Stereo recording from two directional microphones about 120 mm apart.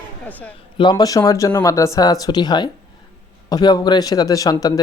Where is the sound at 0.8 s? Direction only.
35° left (ahead or behind).